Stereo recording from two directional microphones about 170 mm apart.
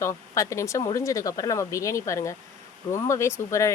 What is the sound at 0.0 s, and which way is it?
Speech, 15° left (ahead or behind).